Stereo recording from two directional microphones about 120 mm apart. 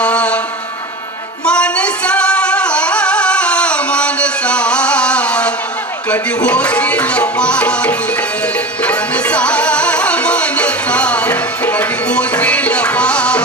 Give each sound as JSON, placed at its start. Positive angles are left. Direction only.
{"t": 0.0, "sound": "a sound", "side_deg": 10}
{"t": 1.5, "sound": "singing", "side_deg": 10}
{"t": 6.1, "sound": "music", "side_deg": 10}